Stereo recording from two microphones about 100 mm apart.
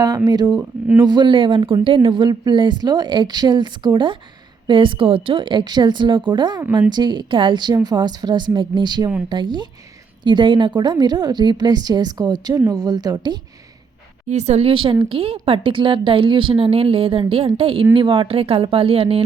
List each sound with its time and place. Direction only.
0.3 s speech: 40° right (ahead or behind)
0.6 s speech: 20° right (ahead or behind)
1.0 s speech: 50° right (ahead or behind)
14.3 s speech: 90° right; by 14.9 s 60° right (ahead or behind)
15.1 s a woman's voice: 70° right (ahead or behind)
17.9 s speech: 55° right (ahead or behind)